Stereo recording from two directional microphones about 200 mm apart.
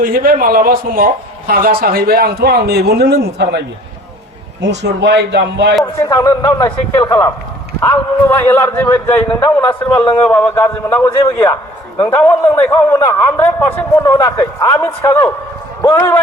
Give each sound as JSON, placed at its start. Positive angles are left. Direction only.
{"t": 0.0, "sound": "a man's voice", "side_deg": -45}
{"t": 4.6, "sound": "a man's voice", "side_deg": -60}
{"t": 5.8, "sound": "a man's voice", "side_deg": 15}